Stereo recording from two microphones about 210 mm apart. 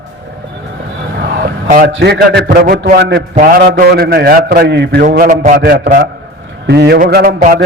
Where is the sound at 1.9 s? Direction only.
55° right (ahead or behind).